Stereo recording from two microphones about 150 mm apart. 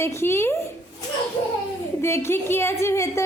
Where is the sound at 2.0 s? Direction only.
15° left (ahead or behind).